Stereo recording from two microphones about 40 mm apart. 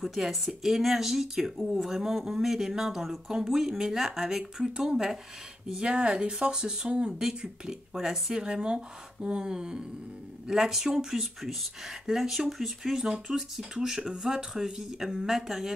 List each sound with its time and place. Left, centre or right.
0.0 s speech: centre
6.9 s speech: right
7.2 s speech: centre